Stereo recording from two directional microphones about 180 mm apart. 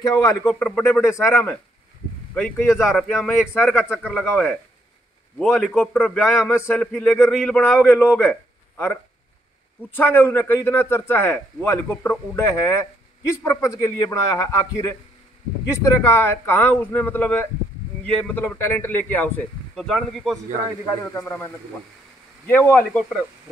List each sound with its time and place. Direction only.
0.0 s speech: 20° left (ahead or behind)
0.5 s a man's voice: 5° left (ahead or behind)
2.7 s a man's voice: centre (ahead or behind)
3.3 s a man's voice: 10° left (ahead or behind)
22.5 s a man's voice: 10° left (ahead or behind)